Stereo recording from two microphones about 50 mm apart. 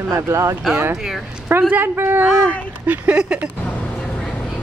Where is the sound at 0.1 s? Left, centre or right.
Right.